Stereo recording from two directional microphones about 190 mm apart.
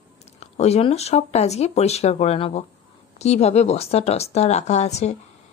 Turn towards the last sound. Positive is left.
turn(degrees=35)  # may be behind; listen again after turning